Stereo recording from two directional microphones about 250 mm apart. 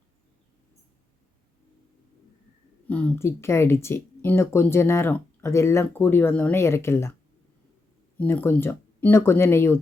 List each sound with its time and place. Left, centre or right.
2.8 s speech: centre
8.2 s speech: centre